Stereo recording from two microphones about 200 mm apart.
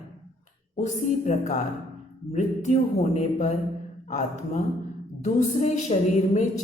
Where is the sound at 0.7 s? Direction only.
35° left (ahead or behind).